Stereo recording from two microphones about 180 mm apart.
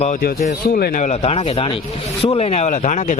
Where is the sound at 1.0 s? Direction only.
35° left (ahead or behind).